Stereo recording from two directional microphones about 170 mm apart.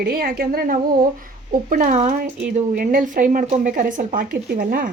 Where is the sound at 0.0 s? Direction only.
60° right (ahead or behind).